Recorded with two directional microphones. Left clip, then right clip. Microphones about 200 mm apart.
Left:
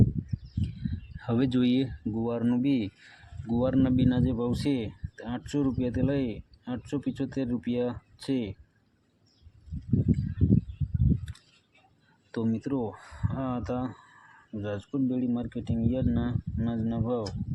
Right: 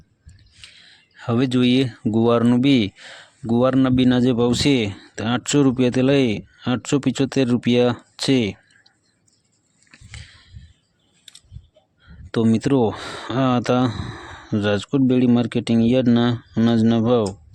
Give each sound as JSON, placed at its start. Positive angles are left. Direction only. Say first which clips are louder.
{"t": 0.6, "sound": "speech", "louder": "left 1 dB", "side_deg": -30}
{"t": 12.3, "sound": "speech", "louder": "right 12 dB", "side_deg": -40}